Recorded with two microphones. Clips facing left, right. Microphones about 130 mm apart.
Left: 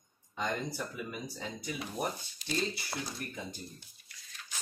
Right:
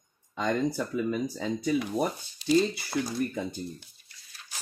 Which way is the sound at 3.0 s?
70° right (ahead or behind).